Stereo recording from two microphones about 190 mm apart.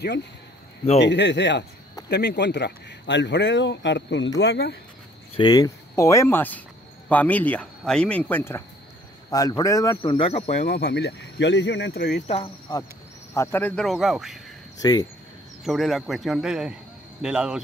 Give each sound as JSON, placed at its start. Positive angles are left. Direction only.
{"t": 0.9, "sound": "speech", "side_deg": 65}
{"t": 5.3, "sound": "speech", "side_deg": 20}
{"t": 10.1, "sound": "speech", "side_deg": 30}
{"t": 10.6, "sound": "speech", "side_deg": 55}
{"t": 12.3, "sound": "speech", "side_deg": 25}
{"t": 13.3, "sound": "a man's voice", "side_deg": 10}
{"t": 14.8, "sound": "speech", "side_deg": 20}
{"t": 15.6, "sound": "a man's voice", "side_deg": 0}